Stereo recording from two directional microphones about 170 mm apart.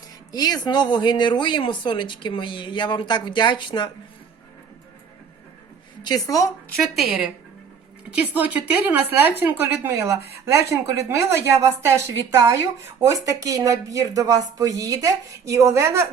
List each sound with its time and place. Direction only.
0.3 s speech: 25° left (ahead or behind)
6.0 s speech: 25° left (ahead or behind)
6.9 s a woman's voice: centre (ahead or behind)